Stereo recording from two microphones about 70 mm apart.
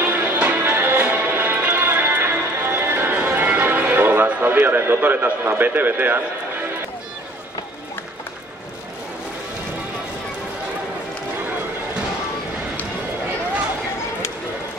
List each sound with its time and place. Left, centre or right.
0.0 s music: right